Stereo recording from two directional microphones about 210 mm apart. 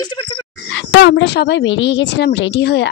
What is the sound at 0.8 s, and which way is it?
A woman's voice, 55° left (ahead or behind).